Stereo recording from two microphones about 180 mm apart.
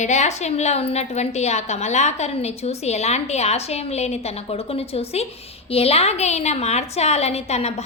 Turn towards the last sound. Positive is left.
turn(degrees=35)  # may be behind; listen again after turning